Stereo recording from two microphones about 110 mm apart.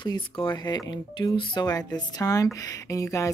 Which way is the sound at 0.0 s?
45° left (ahead or behind).